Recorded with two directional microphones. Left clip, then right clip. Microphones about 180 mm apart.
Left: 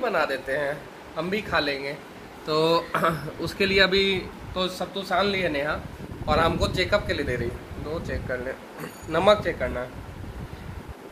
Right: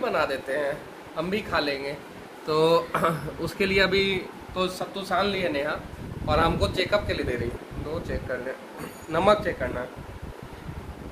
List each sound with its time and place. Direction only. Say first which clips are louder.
0.0 s speech: left 1 dB; 25° left (ahead or behind)
9.1 s speech: left 1 dB; 15° left (ahead or behind)